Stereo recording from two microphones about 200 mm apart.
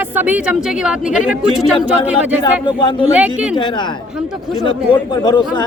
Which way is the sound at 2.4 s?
25° left (ahead or behind).